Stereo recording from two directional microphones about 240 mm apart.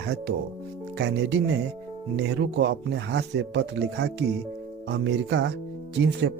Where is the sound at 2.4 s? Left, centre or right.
Right.